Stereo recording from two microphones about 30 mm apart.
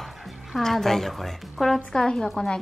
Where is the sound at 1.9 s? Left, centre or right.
Left.